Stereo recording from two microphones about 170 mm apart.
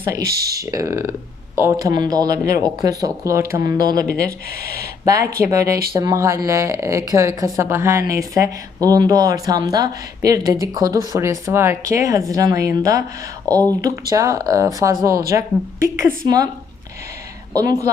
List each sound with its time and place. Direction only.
0.0 s a woman's voice: 20° right (ahead or behind)
3.9 s speech: 55° left (ahead or behind)
4.3 s speech: 65° right (ahead or behind)
5.0 s a woman's voice: 20° right (ahead or behind)
14.1 s a woman's voice: 20° right (ahead or behind)
17.5 s a woman's voice: 20° right (ahead or behind)